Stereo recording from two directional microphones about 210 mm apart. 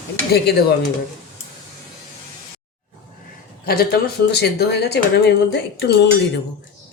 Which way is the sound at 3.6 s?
45° left (ahead or behind).